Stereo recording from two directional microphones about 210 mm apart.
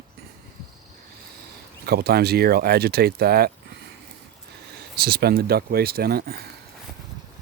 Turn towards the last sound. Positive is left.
turn(degrees=-45)  # may be behind; listen again after turning